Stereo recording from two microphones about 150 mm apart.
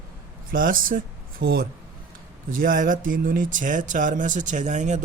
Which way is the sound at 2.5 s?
70° right (ahead or behind).